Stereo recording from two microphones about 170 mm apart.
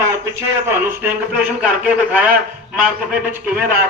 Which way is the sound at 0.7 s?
10° right (ahead or behind).